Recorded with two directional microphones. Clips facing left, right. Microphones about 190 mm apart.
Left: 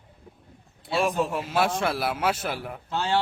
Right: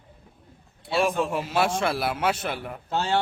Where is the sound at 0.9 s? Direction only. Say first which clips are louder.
Right 1 dB; centre (ahead or behind).